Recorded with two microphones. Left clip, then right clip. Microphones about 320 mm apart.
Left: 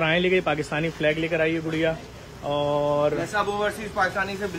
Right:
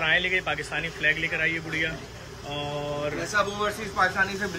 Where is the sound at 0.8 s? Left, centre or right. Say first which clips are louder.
Right 1 dB; left.